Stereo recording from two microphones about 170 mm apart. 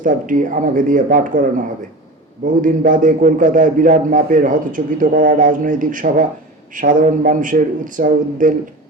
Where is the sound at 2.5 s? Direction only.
50° right (ahead or behind).